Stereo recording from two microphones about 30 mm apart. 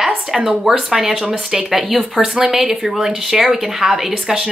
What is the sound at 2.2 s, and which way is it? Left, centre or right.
Speech, right.